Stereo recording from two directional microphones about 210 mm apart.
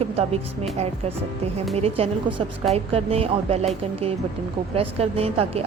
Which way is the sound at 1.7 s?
30° right (ahead or behind).